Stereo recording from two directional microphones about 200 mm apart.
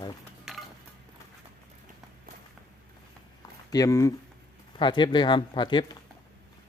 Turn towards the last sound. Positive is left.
turn(degrees=20)  # may be behind; listen again after turning